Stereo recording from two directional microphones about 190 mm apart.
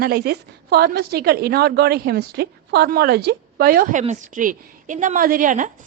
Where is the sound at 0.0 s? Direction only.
55° right (ahead or behind).